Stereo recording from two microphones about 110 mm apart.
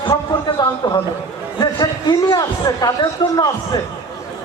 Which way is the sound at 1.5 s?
40° left (ahead or behind).